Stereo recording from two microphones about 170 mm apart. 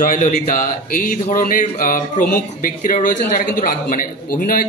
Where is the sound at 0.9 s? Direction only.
50° left (ahead or behind).